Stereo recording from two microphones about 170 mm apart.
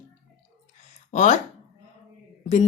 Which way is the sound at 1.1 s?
45° left (ahead or behind).